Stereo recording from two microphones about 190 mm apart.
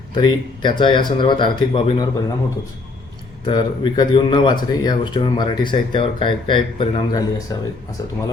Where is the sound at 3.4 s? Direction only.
25° left (ahead or behind).